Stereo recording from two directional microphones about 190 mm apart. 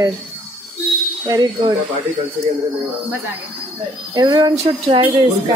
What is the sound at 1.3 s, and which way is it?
Speech, 20° right (ahead or behind).